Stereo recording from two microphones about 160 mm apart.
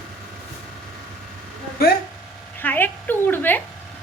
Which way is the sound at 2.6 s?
10° left (ahead or behind).